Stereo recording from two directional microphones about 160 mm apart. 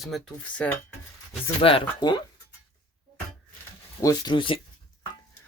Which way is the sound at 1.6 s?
30° left (ahead or behind).